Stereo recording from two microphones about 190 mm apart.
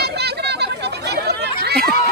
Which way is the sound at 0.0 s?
60° right (ahead or behind).